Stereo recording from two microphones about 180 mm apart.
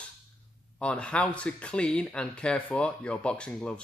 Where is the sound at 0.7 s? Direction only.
5° left (ahead or behind).